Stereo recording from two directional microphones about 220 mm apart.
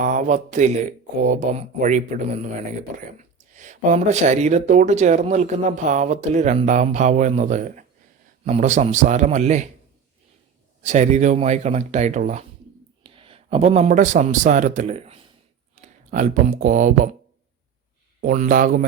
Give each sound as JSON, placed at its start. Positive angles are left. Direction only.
{"t": 0.0, "sound": "speech", "side_deg": -35}
{"t": 10.8, "sound": "a man's voice", "side_deg": -30}
{"t": 18.2, "sound": "speech", "side_deg": -35}